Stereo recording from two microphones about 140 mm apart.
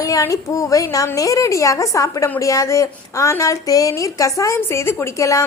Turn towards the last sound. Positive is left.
turn(degrees=20)  # may be behind; listen again after turning